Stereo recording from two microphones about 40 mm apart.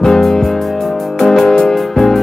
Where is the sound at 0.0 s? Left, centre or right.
Centre.